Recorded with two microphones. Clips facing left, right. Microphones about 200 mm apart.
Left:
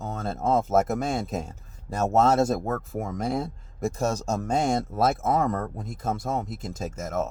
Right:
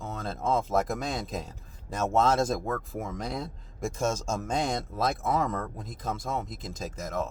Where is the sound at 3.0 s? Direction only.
50° left (ahead or behind).